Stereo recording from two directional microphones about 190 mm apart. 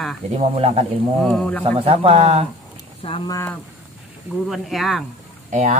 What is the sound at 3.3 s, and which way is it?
Speech, 15° left (ahead or behind).